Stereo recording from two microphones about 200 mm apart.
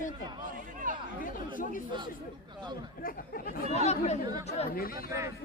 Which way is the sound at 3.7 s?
35° left (ahead or behind).